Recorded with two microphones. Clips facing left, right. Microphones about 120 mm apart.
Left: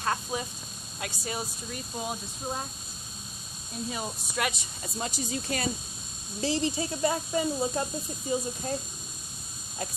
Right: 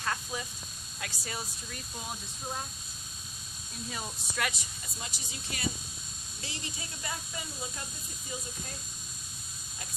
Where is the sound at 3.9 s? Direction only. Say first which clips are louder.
Left 3 dB; 20° left (ahead or behind).